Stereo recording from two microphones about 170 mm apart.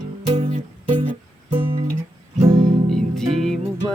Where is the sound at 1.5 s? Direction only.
30° right (ahead or behind).